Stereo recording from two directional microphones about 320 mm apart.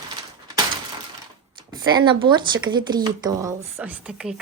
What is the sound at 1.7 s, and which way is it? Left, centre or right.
Speech, centre.